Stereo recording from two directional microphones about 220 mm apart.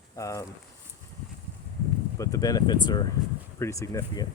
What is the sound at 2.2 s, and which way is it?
Speech, 15° left (ahead or behind).